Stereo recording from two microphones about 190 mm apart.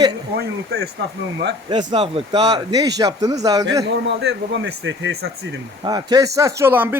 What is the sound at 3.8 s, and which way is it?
A man's voice, 65° right (ahead or behind).